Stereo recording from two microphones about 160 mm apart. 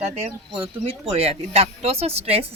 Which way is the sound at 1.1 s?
40° right (ahead or behind).